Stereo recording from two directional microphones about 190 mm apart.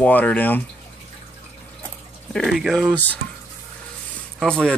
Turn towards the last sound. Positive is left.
turn(degrees=5)  # may be behind; listen again after turning